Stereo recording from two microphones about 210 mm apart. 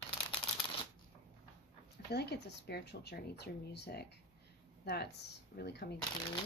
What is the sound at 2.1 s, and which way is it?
Speech, 50° left (ahead or behind).